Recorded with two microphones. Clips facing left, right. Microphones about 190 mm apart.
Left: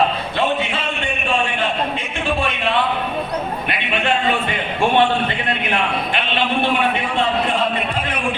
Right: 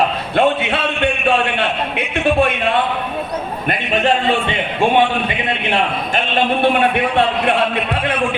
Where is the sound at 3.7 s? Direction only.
40° right (ahead or behind).